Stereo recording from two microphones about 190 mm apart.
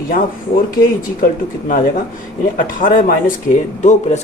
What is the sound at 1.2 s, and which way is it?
Speech, 45° left (ahead or behind).